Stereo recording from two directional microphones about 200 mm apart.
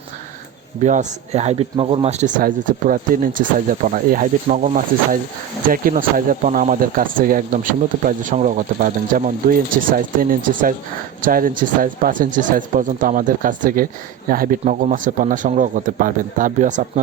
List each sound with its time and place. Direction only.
0.9 s speech: 35° right (ahead or behind)